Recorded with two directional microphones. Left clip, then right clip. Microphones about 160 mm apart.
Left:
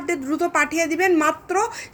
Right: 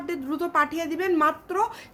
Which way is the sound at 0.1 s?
20° left (ahead or behind).